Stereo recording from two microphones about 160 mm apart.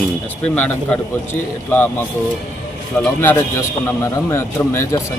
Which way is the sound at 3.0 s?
10° left (ahead or behind).